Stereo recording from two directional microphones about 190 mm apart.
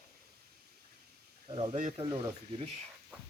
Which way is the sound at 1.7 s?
40° right (ahead or behind).